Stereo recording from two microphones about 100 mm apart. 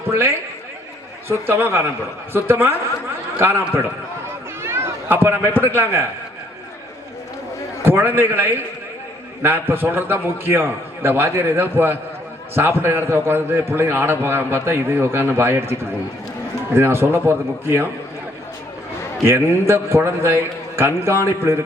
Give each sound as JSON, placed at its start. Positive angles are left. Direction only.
{"t": 0.1, "sound": "a man's voice", "side_deg": -25}
{"t": 7.8, "sound": "a man's voice", "side_deg": -20}
{"t": 16.7, "sound": "a man's voice", "side_deg": -25}
{"t": 19.2, "sound": "a man's voice", "side_deg": -25}